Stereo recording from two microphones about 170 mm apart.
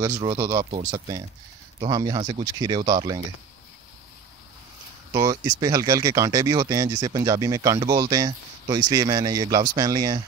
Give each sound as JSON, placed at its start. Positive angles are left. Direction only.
{"t": 0.2, "sound": "speech", "side_deg": -20}
{"t": 0.7, "sound": "speech", "side_deg": -35}
{"t": 0.9, "sound": "speech", "side_deg": -20}
{"t": 5.1, "sound": "speech", "side_deg": -20}